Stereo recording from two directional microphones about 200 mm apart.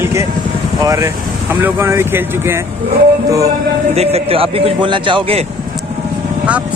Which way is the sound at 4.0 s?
30° right (ahead or behind).